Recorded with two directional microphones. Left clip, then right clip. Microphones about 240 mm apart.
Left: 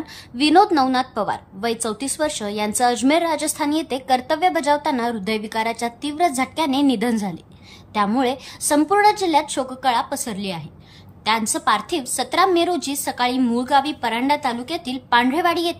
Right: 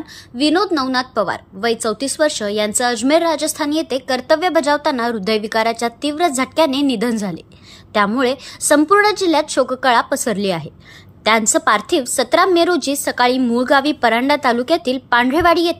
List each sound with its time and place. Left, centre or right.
0.4 s a woman's voice: centre